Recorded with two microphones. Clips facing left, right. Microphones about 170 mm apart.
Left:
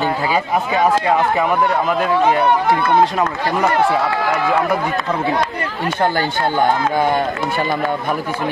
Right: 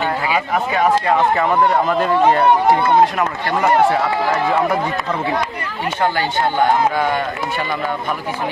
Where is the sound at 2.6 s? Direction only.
25° right (ahead or behind).